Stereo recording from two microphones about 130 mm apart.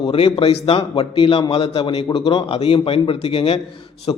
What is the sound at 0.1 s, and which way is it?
A man's voice, 45° left (ahead or behind).